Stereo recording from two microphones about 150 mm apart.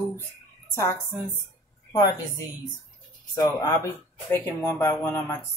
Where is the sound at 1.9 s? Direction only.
25° left (ahead or behind).